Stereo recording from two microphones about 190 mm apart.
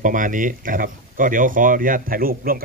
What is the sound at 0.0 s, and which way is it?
Speech, 45° right (ahead or behind).